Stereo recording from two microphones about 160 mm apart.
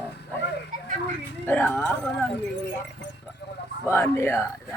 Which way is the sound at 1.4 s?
10° left (ahead or behind).